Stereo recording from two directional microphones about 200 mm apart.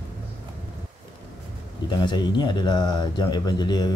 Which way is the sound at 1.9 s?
20° left (ahead or behind).